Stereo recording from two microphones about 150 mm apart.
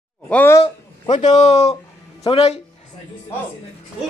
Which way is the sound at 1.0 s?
50° left (ahead or behind).